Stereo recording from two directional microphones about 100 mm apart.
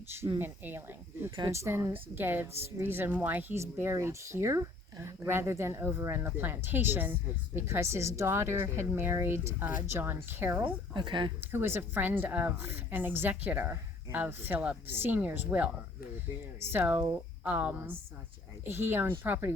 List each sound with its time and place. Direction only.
0.3 s a woman's voice: 20° right (ahead or behind)
10.9 s speech: 55° right (ahead or behind)
11.3 s a woman's voice: 20° right (ahead or behind)